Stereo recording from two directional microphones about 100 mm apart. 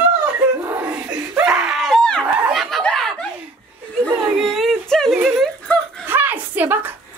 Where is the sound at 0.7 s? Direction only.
20° right (ahead or behind); by 2.2 s 5° left (ahead or behind).